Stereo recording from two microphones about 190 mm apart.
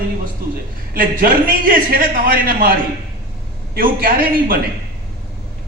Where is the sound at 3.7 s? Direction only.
50° right (ahead or behind).